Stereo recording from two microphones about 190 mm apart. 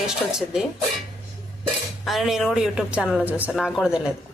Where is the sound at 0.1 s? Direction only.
5° right (ahead or behind).